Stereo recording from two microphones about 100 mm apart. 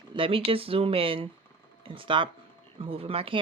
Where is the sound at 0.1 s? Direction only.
65° right (ahead or behind).